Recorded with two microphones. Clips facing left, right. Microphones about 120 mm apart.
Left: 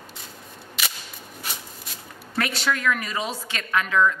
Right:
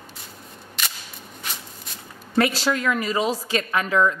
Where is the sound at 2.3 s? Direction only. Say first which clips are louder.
Right 5 dB; 30° right (ahead or behind).